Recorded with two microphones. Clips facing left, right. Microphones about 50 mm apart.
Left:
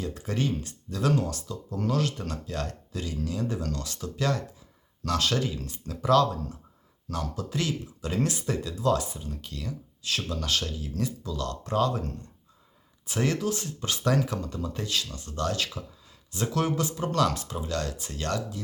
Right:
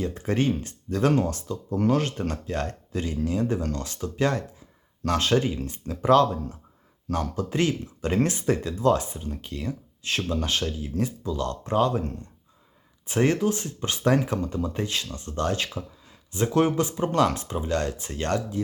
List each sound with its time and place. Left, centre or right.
0.0 s speech: right